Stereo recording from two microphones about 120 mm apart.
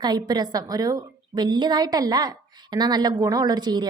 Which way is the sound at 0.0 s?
35° right (ahead or behind).